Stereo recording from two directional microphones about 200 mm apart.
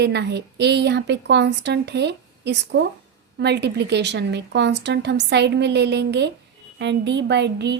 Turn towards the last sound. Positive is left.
turn(degrees=-60)  # may be behind; listen again after turning